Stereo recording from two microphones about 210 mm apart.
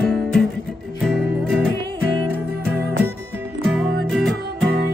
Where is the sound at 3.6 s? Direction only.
Centre (ahead or behind).